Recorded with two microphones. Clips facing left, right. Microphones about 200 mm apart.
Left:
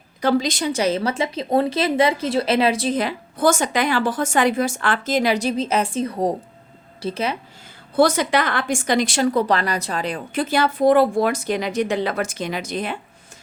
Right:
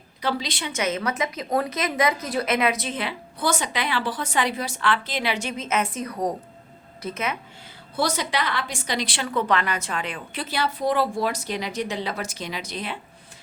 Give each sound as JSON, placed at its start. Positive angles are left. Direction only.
{"t": 0.2, "sound": "a woman's voice", "side_deg": 45}
{"t": 7.9, "sound": "a woman's voice", "side_deg": 50}